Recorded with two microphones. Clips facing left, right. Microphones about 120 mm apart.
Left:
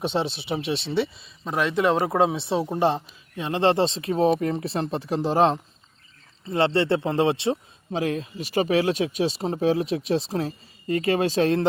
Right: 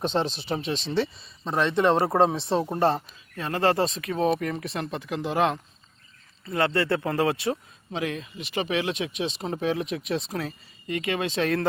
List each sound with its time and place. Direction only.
0.0 s speech: 10° left (ahead or behind)
2.7 s speech: 15° left (ahead or behind); by 11.6 s 30° left (ahead or behind)